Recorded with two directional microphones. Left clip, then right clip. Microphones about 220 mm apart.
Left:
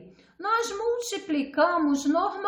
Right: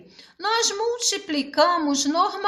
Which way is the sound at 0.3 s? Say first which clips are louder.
Right 4 dB; 35° right (ahead or behind).